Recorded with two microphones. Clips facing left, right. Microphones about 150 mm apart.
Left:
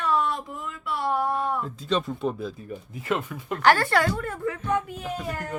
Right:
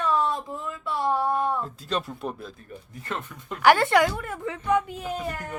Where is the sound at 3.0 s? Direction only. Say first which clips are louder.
Left 7 dB; 5° left (ahead or behind).